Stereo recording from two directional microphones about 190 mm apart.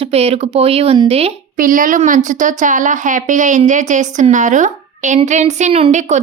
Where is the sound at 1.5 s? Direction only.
45° right (ahead or behind).